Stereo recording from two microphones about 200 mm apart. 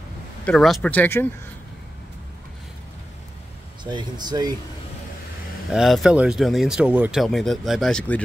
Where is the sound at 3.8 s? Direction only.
25° right (ahead or behind).